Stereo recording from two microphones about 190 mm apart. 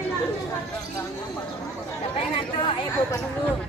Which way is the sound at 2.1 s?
25° left (ahead or behind).